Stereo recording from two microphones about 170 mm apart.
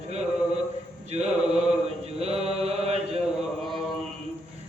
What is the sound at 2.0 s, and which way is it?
Mantra, 35° right (ahead or behind).